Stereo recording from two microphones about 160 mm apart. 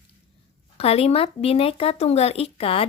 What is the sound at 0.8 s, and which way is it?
Speech, 40° left (ahead or behind).